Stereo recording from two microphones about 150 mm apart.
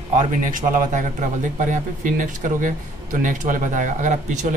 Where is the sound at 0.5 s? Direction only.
60° right (ahead or behind).